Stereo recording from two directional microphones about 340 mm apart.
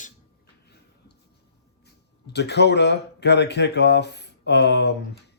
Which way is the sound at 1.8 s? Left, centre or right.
Left.